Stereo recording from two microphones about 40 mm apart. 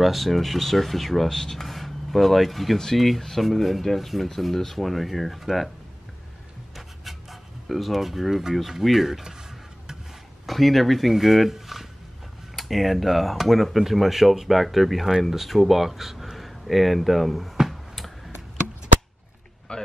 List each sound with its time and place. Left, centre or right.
0.0 s speech: centre
7.1 s speech: centre
10.4 s speech: centre
19.7 s a sound: left